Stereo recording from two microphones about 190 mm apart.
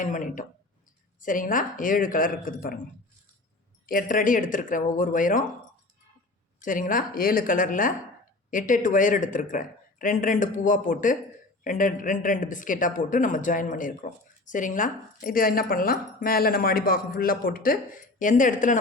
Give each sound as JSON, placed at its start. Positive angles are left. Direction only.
{"t": 0.0, "sound": "speech", "side_deg": 45}
{"t": 3.8, "sound": "speech", "side_deg": 45}
{"t": 6.6, "sound": "speech", "side_deg": 45}